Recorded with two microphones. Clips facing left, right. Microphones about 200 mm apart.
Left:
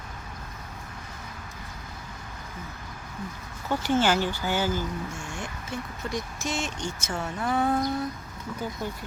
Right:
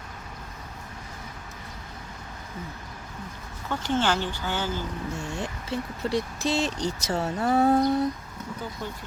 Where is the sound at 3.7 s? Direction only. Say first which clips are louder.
Left 2 dB; 10° left (ahead or behind).